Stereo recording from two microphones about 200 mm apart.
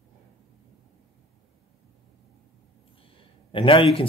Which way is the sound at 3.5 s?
25° left (ahead or behind).